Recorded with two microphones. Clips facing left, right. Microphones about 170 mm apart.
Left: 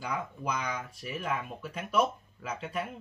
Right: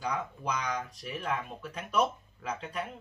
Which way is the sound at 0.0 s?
10° left (ahead or behind).